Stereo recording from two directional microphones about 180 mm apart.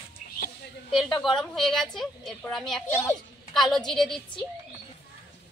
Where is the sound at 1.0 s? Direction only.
Centre (ahead or behind).